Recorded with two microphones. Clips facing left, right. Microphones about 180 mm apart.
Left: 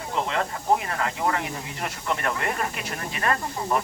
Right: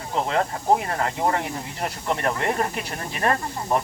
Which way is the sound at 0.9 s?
35° right (ahead or behind).